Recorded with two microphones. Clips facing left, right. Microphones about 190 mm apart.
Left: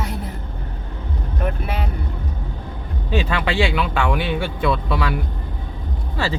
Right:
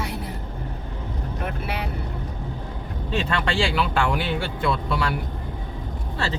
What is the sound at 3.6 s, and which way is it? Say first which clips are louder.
Speech: left 2 dB; 60° left (ahead or behind).